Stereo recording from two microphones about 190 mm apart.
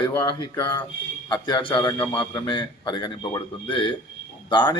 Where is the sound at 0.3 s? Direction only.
20° left (ahead or behind).